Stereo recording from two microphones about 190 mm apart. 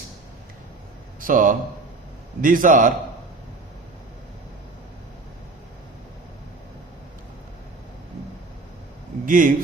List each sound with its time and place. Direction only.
1.2 s a man's voice: 45° right (ahead or behind)
9.2 s speech: 45° right (ahead or behind)